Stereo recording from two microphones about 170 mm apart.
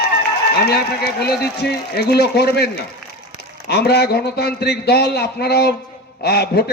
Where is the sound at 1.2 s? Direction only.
70° left (ahead or behind).